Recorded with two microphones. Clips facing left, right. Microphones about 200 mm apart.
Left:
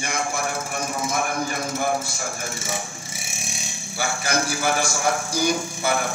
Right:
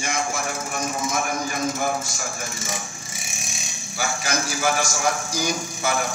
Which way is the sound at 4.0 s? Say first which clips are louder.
Left 2 dB; 55° left (ahead or behind).